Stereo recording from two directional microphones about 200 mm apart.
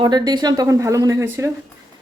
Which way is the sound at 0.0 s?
20° right (ahead or behind).